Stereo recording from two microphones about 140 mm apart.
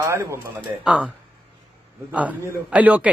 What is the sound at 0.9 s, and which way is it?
Speech, 5° right (ahead or behind).